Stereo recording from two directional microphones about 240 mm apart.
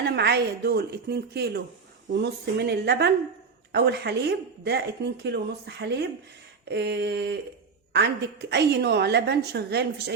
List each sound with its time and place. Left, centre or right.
0.0 s a woman's voice: right